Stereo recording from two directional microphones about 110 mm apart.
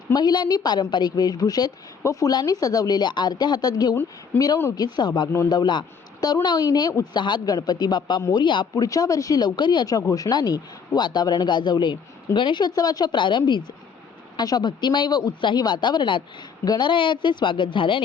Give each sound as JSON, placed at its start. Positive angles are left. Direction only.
{"t": 0.1, "sound": "speech", "side_deg": 40}
{"t": 8.7, "sound": "speech", "side_deg": 35}